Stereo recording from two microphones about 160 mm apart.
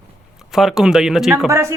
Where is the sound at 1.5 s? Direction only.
15° right (ahead or behind).